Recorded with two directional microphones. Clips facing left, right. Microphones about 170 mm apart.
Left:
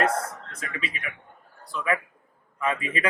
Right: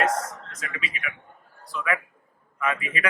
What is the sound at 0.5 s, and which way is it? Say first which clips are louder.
Speech: left 1 dB; 35° left (ahead or behind).